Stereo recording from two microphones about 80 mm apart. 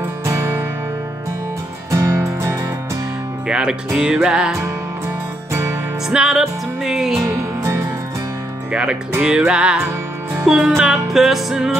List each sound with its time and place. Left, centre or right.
0.2 s music: right
1.9 s music: right
3.4 s music: centre
6.0 s music: centre
7.3 s music: right
9.2 s music: centre